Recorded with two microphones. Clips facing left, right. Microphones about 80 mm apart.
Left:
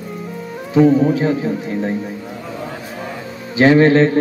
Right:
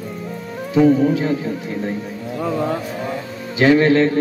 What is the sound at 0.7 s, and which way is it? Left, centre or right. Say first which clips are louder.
Speech: left 2 dB; centre.